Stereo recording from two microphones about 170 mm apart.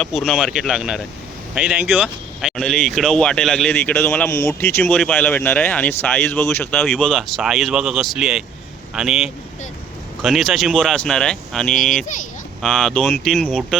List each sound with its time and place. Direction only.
0.0 s speech: centre (ahead or behind)
11.7 s speech: 50° left (ahead or behind)
12.6 s speech: 5° left (ahead or behind)